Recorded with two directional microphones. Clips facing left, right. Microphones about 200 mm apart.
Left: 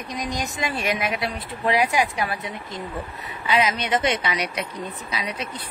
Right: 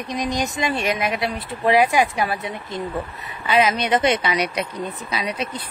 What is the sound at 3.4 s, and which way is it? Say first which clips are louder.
Speech: right 3 dB; 55° right (ahead or behind).